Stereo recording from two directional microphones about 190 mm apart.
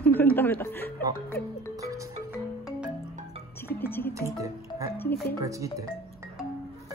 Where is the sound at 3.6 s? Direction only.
10° left (ahead or behind).